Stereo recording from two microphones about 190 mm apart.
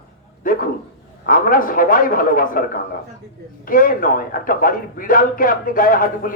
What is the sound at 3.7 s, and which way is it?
A man's voice, 50° left (ahead or behind).